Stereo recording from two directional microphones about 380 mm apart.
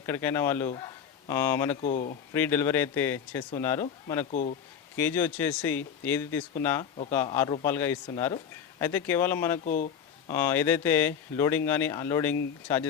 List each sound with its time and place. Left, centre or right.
0.0 s speech: centre
1.8 s speech: centre
2.3 s speech: centre
4.3 s speech: centre
4.9 s speech: centre
9.6 s speech: centre
10.2 s speech: centre